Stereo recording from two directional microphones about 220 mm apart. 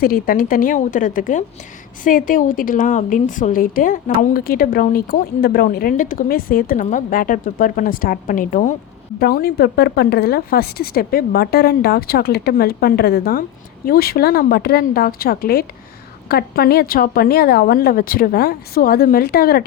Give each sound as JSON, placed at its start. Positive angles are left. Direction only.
{"t": 0.0, "sound": "a woman's voice", "side_deg": 40}